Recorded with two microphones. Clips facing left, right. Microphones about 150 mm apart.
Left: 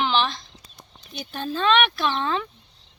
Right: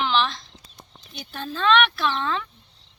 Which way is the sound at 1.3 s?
30° left (ahead or behind).